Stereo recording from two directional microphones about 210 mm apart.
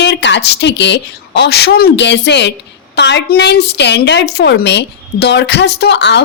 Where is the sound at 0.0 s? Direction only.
55° left (ahead or behind).